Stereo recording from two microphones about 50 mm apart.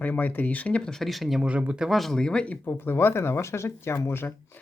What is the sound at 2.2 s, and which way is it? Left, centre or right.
Speech, centre.